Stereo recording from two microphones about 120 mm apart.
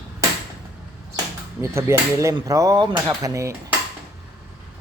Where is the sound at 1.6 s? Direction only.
25° right (ahead or behind).